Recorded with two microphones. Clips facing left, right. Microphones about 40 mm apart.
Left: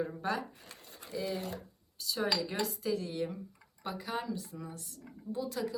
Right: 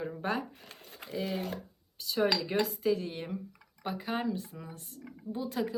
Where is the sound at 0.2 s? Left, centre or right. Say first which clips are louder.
Right 2 dB; right.